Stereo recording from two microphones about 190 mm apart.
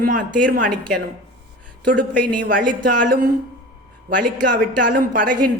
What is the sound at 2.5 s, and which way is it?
Speech, 45° right (ahead or behind).